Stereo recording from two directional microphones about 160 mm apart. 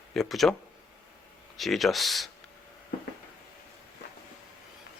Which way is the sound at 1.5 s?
Centre (ahead or behind).